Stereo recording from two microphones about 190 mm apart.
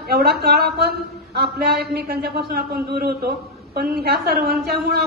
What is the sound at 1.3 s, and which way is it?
A man's voice, 55° right (ahead or behind).